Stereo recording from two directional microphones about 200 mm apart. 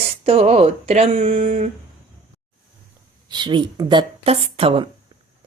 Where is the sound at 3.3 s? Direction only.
20° right (ahead or behind).